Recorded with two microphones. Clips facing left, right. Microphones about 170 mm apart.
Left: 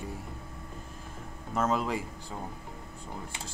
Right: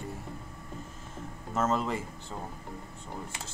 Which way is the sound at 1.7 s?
5° left (ahead or behind).